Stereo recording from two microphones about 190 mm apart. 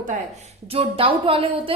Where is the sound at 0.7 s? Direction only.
30° right (ahead or behind).